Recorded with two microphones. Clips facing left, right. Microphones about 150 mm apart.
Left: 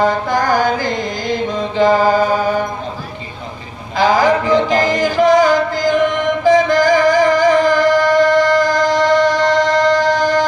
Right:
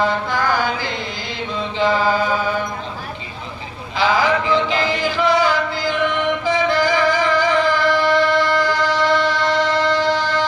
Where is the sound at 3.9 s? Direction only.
45° left (ahead or behind).